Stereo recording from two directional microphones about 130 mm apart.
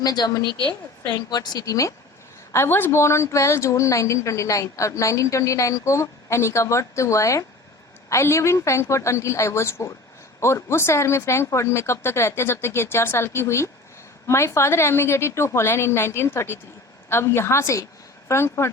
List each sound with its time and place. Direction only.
0.0 s a woman's voice: 30° left (ahead or behind)